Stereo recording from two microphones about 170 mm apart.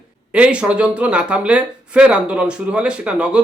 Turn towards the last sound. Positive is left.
turn(degrees=-5)  # may be behind; listen again after turning